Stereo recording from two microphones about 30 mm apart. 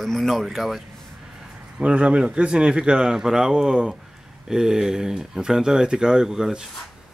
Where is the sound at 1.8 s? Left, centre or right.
Right; by 6.5 s centre.